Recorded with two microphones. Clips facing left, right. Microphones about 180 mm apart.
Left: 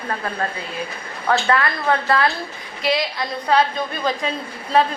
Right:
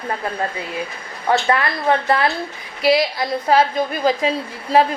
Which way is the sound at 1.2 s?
25° right (ahead or behind).